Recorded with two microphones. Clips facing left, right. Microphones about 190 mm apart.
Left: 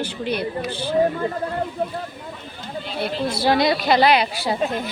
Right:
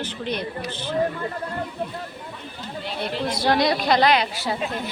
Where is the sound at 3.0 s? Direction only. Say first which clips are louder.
Left 3 dB; 5° left (ahead or behind).